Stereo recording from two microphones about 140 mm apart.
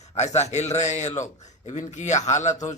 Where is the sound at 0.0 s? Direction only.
50° left (ahead or behind).